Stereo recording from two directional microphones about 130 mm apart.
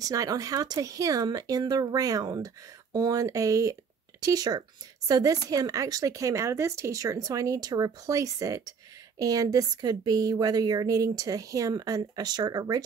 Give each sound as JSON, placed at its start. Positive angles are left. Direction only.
{"t": 0.0, "sound": "speech", "side_deg": -25}